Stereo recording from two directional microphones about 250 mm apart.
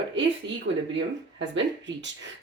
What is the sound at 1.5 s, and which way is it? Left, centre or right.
Speech, right.